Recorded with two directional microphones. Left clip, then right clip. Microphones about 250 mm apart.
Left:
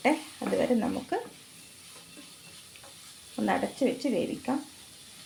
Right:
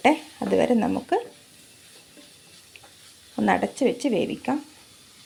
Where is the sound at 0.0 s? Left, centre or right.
Right.